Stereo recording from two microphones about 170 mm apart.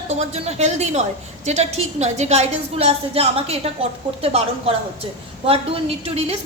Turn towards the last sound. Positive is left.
turn(degrees=-35)  # may be behind; listen again after turning